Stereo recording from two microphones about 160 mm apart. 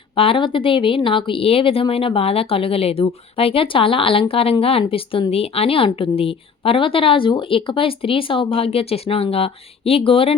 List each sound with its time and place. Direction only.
0.2 s speech: 35° left (ahead or behind)